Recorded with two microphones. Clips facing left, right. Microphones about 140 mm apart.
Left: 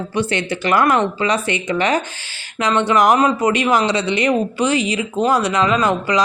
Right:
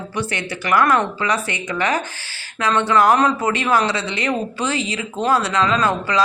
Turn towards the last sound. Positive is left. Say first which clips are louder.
# left 2 dB
turn(degrees=15)  # may be behind; listen again after turning